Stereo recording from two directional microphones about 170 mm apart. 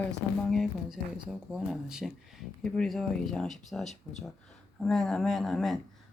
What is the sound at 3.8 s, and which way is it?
Speech, 40° left (ahead or behind).